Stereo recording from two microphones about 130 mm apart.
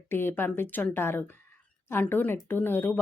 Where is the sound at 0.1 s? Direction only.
15° left (ahead or behind).